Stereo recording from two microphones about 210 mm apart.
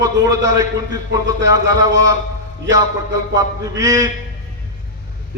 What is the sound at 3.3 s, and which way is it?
Speech, 15° right (ahead or behind).